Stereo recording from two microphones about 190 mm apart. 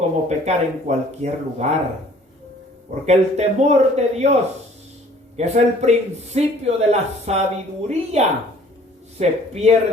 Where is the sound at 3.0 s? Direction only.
35° right (ahead or behind).